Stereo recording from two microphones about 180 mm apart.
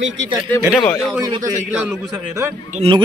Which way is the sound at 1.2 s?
20° right (ahead or behind).